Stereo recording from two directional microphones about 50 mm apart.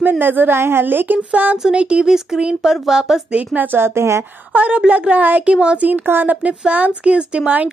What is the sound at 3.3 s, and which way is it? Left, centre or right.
Speech, right.